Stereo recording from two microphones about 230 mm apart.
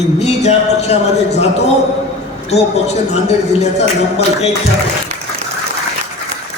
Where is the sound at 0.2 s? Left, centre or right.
Left.